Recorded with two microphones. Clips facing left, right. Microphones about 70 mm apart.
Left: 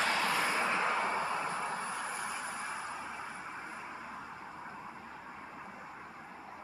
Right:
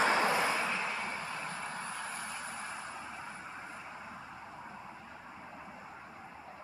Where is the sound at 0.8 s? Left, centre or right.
Left.